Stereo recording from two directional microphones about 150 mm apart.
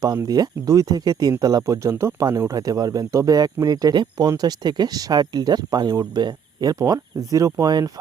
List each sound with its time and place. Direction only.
0.0 s speech: 25° right (ahead or behind)